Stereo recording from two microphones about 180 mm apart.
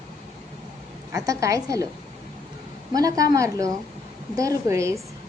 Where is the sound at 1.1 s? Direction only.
15° right (ahead or behind).